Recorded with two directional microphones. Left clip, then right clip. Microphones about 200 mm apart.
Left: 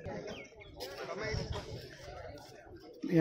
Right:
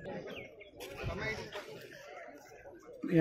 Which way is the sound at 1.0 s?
40° right (ahead or behind).